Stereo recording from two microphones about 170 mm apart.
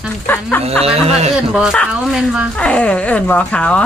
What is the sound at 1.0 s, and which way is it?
Speech, 40° right (ahead or behind).